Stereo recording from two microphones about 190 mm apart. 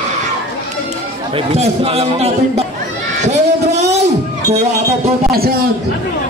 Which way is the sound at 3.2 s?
35° right (ahead or behind).